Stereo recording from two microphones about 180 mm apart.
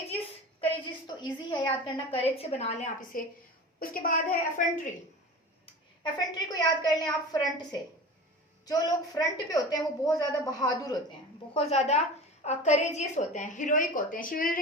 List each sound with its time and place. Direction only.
0.6 s a sound: 25° left (ahead or behind)
2.3 s a woman's voice: 35° left (ahead or behind)
6.0 s a woman's voice: 25° left (ahead or behind)
11.5 s a woman's voice: 35° left (ahead or behind); by 14.6 s 50° left (ahead or behind)